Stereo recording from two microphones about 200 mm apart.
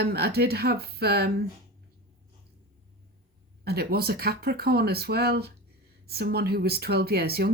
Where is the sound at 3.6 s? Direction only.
50° right (ahead or behind).